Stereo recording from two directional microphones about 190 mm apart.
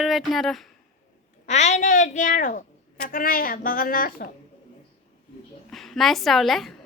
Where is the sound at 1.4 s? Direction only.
35° left (ahead or behind).